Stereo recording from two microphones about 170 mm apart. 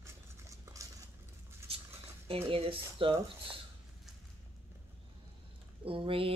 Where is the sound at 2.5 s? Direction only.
30° right (ahead or behind).